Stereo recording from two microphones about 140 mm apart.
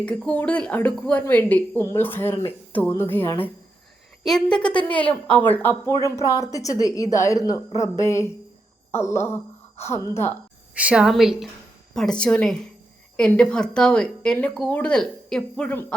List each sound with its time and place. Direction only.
0.0 s a woman's voice: 5° left (ahead or behind)
10.8 s a woman's voice: 10° right (ahead or behind); by 16.0 s 5° left (ahead or behind)